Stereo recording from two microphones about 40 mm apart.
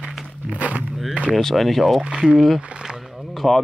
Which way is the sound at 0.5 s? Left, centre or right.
Right.